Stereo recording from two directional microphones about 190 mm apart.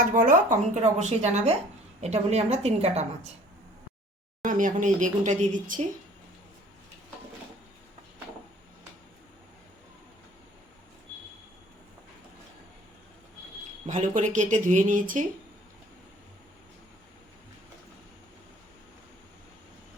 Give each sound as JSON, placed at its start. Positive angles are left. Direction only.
{"t": 0.0, "sound": "speech", "side_deg": -45}
{"t": 4.4, "sound": "speech", "side_deg": -45}
{"t": 13.8, "sound": "speech", "side_deg": -40}